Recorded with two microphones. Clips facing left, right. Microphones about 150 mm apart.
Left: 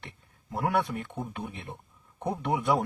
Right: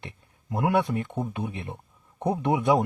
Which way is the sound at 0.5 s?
20° right (ahead or behind).